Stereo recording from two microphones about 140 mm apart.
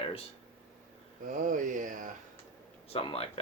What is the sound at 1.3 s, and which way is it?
Speech, 70° right (ahead or behind).